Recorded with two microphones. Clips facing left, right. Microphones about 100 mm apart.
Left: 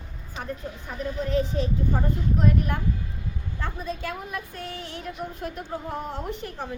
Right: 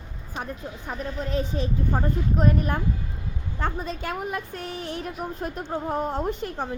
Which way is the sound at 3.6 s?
70° right (ahead or behind).